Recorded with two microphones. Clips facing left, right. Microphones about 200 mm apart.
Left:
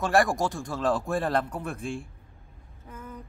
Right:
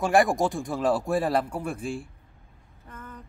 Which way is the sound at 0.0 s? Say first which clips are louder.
Right 2 dB; 15° right (ahead or behind).